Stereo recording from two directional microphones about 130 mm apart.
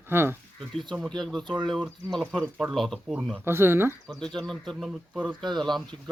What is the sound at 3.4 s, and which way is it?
Speech, 20° right (ahead or behind).